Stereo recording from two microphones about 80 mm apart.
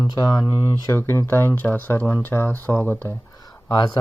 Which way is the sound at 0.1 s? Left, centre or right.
Left.